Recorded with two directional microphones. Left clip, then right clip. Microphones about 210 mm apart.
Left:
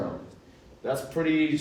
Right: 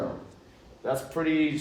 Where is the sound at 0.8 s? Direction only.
15° right (ahead or behind).